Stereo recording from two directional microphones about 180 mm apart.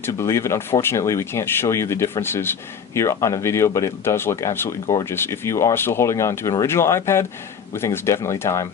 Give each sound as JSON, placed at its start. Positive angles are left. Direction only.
{"t": 0.0, "sound": "speech", "side_deg": 15}